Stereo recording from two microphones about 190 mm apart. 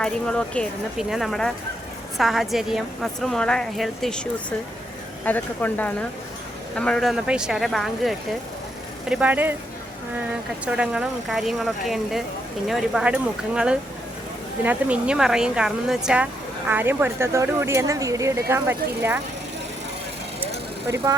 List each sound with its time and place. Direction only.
0.0 s a woman's voice: 5° left (ahead or behind)
10.7 s a woman's voice: 5° right (ahead or behind)
20.9 s speech: 20° right (ahead or behind)